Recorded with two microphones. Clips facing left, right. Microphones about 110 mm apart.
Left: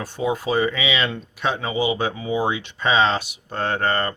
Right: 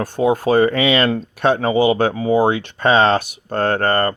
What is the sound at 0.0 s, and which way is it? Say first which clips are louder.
Speech: right 7 dB; 50° right (ahead or behind).